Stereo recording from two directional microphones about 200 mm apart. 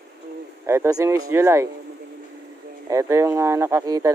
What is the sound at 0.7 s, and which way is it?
Speech, 15° right (ahead or behind).